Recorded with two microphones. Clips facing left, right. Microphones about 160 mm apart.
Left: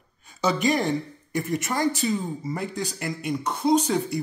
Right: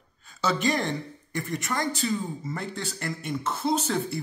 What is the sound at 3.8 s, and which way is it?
Speech, 15° left (ahead or behind).